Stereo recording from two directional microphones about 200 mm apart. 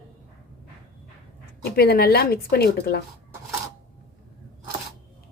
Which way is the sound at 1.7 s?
50° left (ahead or behind).